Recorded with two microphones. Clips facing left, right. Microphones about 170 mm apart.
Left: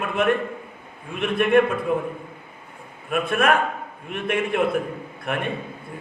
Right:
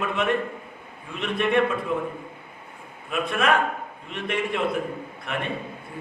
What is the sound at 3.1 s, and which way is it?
Speech, 55° left (ahead or behind).